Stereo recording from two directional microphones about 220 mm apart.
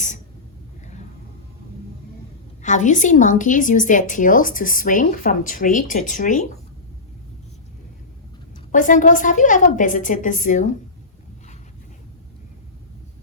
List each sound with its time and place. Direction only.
2.6 s a woman's voice: 35° left (ahead or behind)
8.7 s a woman's voice: 35° left (ahead or behind)